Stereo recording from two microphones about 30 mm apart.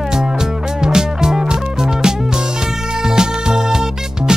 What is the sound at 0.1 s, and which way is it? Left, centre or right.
Music, right.